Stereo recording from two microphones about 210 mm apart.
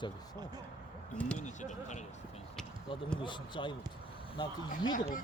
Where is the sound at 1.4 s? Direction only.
35° left (ahead or behind).